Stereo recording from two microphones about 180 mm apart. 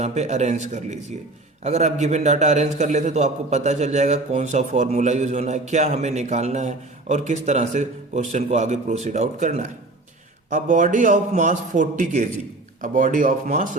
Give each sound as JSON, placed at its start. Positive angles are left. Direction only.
{"t": 0.0, "sound": "a man's voice", "side_deg": -40}